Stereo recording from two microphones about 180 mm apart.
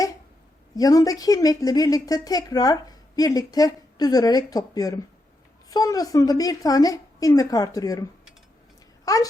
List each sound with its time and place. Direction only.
0.8 s a woman's voice: 20° left (ahead or behind)
9.0 s a woman's voice: 20° left (ahead or behind)